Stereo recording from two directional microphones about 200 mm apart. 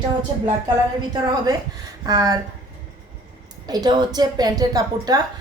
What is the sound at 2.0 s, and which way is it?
Speech, 20° right (ahead or behind).